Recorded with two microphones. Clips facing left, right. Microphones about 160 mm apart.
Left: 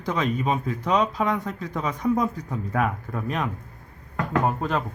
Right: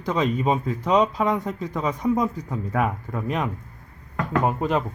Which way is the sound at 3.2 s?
20° right (ahead or behind).